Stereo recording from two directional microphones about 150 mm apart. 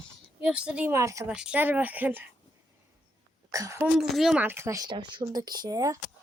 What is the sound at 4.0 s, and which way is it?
Speech, centre (ahead or behind).